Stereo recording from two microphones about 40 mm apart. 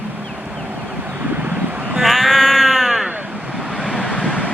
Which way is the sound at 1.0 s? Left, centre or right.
Right.